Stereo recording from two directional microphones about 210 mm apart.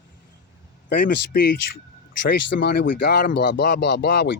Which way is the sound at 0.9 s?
50° left (ahead or behind).